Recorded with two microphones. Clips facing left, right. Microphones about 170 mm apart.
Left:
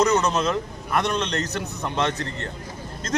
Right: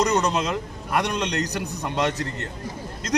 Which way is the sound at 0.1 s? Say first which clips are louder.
Left 1 dB; 15° right (ahead or behind).